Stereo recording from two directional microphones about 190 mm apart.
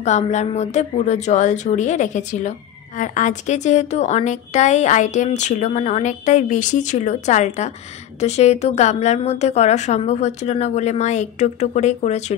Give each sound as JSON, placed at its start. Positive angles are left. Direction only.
{"t": 0.0, "sound": "a woman's voice", "side_deg": 35}